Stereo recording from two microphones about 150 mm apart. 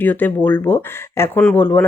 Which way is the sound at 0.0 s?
15° left (ahead or behind).